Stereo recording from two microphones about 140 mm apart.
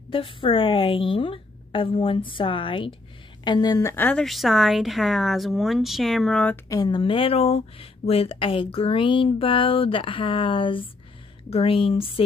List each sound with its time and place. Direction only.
0.1 s a woman's voice: 40° left (ahead or behind)
3.9 s a woman's voice: 10° left (ahead or behind)
6.5 s speech: 25° left (ahead or behind)